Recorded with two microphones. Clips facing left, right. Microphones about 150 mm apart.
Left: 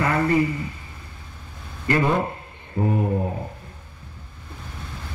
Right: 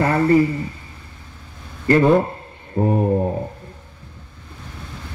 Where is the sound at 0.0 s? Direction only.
30° right (ahead or behind).